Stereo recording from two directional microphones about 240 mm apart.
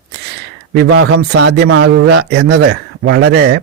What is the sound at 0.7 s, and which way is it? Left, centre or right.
Speech, right.